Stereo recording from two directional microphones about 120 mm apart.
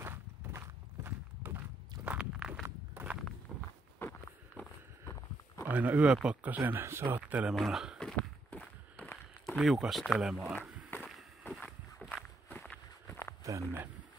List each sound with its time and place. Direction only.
0.0 s clip-clop: 20° right (ahead or behind)
2.0 s walk: 5° right (ahead or behind)
4.0 s a sound: 20° left (ahead or behind)
5.7 s speech: 15° right (ahead or behind)
7.2 s speech: 10° right (ahead or behind)
8.0 s walk: 10° left (ahead or behind)
9.6 s speech: centre (ahead or behind)
10.9 s a sound: 20° left (ahead or behind)
11.6 s walk: 5° left (ahead or behind)
13.4 s speech: 25° right (ahead or behind)